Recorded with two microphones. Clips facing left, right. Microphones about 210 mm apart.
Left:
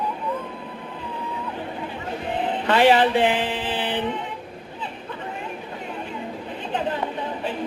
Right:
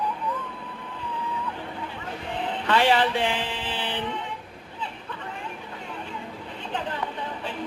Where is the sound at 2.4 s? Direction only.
15° left (ahead or behind).